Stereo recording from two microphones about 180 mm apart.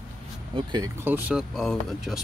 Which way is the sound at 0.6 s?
25° right (ahead or behind).